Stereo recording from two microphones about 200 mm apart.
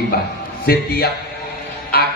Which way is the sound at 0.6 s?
50° left (ahead or behind).